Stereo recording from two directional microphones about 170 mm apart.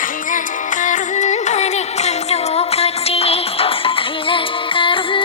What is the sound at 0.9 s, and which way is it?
Music, 45° left (ahead or behind).